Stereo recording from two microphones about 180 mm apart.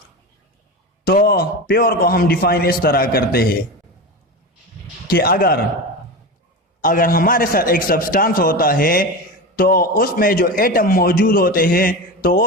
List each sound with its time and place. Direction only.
1.0 s a man's voice: 55° left (ahead or behind)
5.0 s a man's voice: 55° left (ahead or behind)
6.8 s a man's voice: 50° left (ahead or behind)